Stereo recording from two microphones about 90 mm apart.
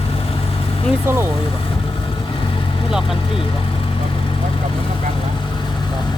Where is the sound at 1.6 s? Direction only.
75° left (ahead or behind).